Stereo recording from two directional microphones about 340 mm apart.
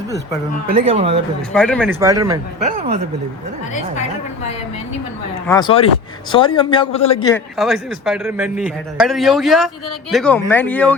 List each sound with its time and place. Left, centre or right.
0.7 s speech: centre
1.5 s speech: centre
5.5 s a man's voice: centre
7.5 s a man's voice: centre